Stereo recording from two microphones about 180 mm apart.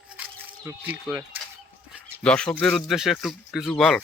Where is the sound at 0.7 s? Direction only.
10° right (ahead or behind).